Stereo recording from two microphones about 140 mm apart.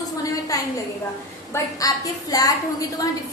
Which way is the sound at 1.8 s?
25° left (ahead or behind).